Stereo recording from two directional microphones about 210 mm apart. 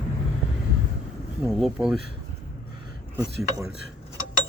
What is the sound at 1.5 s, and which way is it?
Speech, centre (ahead or behind).